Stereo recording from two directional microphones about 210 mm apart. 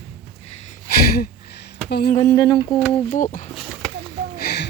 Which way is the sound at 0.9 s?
45° left (ahead or behind).